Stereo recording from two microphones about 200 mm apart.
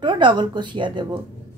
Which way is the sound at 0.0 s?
20° right (ahead or behind).